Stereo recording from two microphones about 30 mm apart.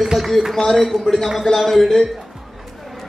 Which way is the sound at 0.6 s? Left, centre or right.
Centre.